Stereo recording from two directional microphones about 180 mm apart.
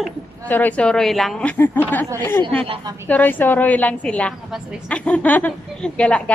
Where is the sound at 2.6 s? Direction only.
30° right (ahead or behind).